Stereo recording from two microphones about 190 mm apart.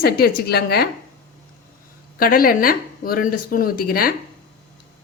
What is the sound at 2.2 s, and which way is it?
Speech, 50° left (ahead or behind).